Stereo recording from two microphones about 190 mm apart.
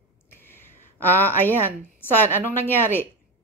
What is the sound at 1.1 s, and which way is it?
A woman's voice, 10° left (ahead or behind).